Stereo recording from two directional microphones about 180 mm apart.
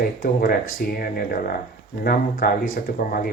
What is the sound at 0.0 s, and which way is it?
Speech, 55° left (ahead or behind).